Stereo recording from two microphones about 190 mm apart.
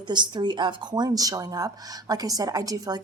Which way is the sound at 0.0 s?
25° right (ahead or behind).